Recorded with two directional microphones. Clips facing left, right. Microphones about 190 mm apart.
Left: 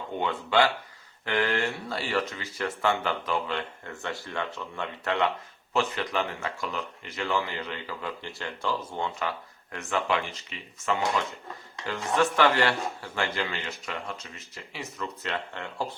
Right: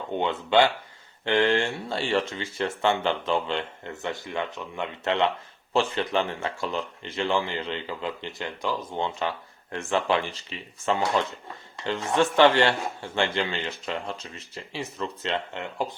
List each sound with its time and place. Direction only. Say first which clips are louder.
0.2 s speech: right 3 dB; 25° right (ahead or behind)
11.9 s speech: right 2 dB; 25° right (ahead or behind)